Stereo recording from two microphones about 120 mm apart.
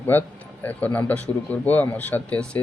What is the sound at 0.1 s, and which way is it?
Speech, 15° left (ahead or behind).